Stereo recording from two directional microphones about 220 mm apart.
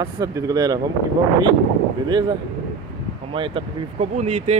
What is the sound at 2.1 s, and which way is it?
Speech, 20° right (ahead or behind).